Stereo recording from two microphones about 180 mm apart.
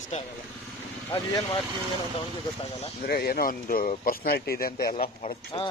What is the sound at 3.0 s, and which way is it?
Speech, 55° left (ahead or behind).